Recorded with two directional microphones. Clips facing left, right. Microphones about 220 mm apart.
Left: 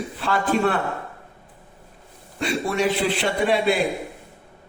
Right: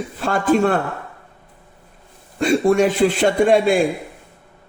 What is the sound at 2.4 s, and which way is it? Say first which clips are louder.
A man's voice: right 8 dB; 50° right (ahead or behind).